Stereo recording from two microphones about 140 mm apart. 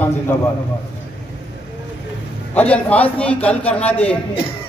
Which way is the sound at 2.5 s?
10° left (ahead or behind).